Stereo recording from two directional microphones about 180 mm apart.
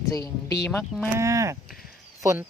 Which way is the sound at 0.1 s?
20° left (ahead or behind).